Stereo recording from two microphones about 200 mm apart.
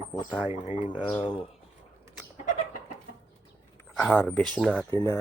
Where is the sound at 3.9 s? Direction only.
10° left (ahead or behind).